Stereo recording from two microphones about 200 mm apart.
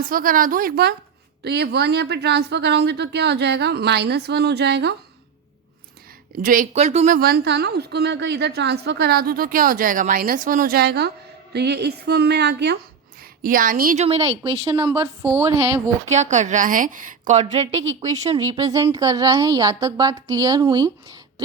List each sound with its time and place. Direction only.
0.0 s a woman's voice: 45° right (ahead or behind)
6.4 s a woman's voice: 45° right (ahead or behind)
13.4 s a woman's voice: 45° right (ahead or behind); by 15.1 s 25° right (ahead or behind)
15.2 s a woman's voice: 10° right (ahead or behind)
16.0 s a woman's voice: 35° right (ahead or behind)
18.4 s a woman's voice: 20° right (ahead or behind)